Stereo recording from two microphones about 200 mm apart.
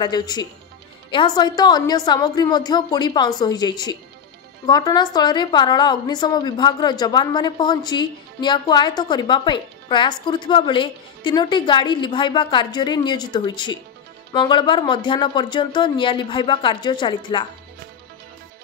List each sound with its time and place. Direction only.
0.0 s a woman's voice: 20° left (ahead or behind)